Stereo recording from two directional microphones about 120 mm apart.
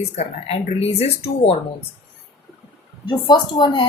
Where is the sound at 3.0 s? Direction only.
40° left (ahead or behind).